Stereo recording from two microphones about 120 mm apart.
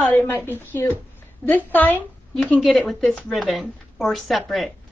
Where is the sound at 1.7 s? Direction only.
15° left (ahead or behind).